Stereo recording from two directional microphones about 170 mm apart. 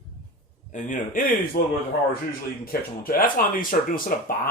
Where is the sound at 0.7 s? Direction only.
50° left (ahead or behind).